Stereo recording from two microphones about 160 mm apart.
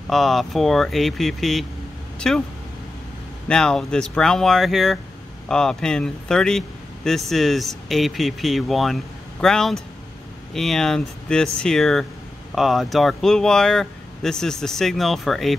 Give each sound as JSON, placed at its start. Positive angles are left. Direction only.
{"t": 0.1, "sound": "speech", "side_deg": 0}
{"t": 3.4, "sound": "speech", "side_deg": 5}